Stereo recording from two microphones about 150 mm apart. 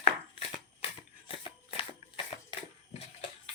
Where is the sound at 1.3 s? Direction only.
35° left (ahead or behind).